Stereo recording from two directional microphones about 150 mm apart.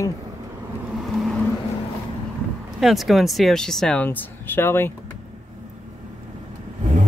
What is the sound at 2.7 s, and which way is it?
Speech, centre (ahead or behind).